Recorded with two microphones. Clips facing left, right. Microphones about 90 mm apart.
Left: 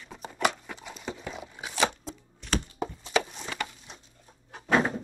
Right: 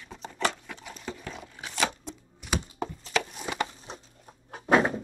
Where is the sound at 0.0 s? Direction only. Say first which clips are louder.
Left 2 dB; 5° left (ahead or behind).